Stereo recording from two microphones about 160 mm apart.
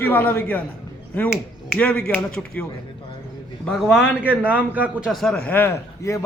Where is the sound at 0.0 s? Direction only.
10° left (ahead or behind).